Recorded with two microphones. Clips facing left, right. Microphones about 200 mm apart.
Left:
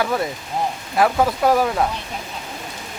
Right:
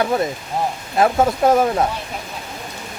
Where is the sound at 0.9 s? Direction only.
25° right (ahead or behind).